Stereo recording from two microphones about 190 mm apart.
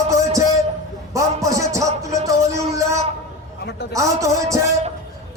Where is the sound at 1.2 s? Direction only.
15° right (ahead or behind).